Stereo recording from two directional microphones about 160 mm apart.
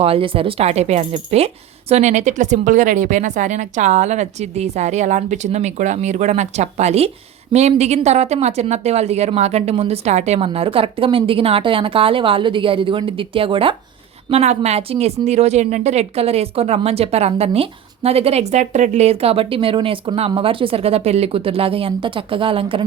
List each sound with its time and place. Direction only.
0.0 s a woman's voice: 35° right (ahead or behind)